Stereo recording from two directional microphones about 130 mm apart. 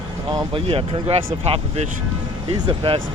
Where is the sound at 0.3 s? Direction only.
40° right (ahead or behind).